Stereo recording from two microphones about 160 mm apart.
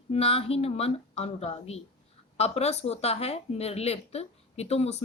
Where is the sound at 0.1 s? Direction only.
40° left (ahead or behind).